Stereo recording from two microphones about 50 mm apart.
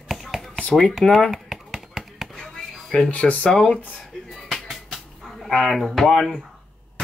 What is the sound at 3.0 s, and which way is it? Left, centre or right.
Speech, left.